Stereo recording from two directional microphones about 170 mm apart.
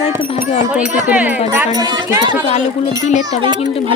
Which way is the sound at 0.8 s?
10° right (ahead or behind).